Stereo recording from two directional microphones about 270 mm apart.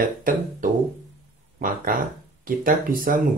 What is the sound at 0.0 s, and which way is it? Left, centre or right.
Speech, right.